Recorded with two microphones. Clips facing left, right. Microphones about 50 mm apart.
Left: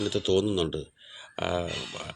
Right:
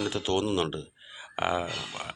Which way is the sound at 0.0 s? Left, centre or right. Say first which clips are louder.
Left 3 dB; right.